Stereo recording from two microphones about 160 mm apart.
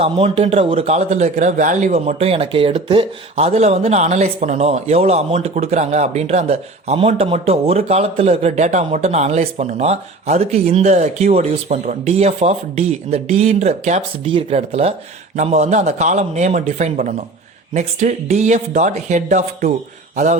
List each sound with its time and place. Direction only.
0.0 s a man's voice: 40° right (ahead or behind)